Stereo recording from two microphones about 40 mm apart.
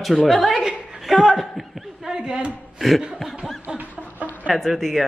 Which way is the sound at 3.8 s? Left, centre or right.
Right.